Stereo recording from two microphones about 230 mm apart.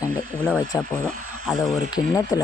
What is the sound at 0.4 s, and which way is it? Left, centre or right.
Speech, centre.